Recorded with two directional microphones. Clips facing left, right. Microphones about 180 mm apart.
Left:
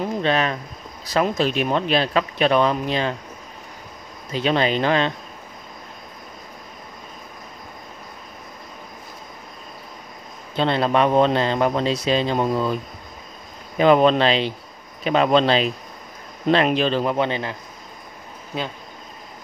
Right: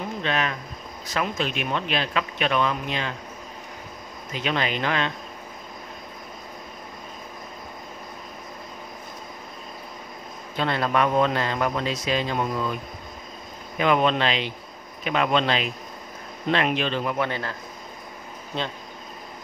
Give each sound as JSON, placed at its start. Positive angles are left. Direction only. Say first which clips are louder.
{"t": 0.2, "sound": "speech", "louder": "left 4 dB", "side_deg": 35}
{"t": 4.3, "sound": "speech", "louder": "left 6 dB", "side_deg": 30}
{"t": 10.5, "sound": "a man's voice", "louder": "left 5 dB", "side_deg": 25}
{"t": 13.7, "sound": "speech", "louder": "left 6 dB", "side_deg": 35}
{"t": 17.3, "sound": "a man's voice", "louder": "left 4 dB", "side_deg": 20}
{"t": 18.5, "sound": "speech", "louder": "left 2 dB", "side_deg": 5}